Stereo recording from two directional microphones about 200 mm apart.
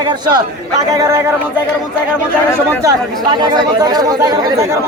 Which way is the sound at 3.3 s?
20° right (ahead or behind).